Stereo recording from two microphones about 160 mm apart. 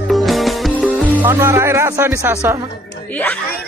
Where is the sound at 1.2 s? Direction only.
15° right (ahead or behind).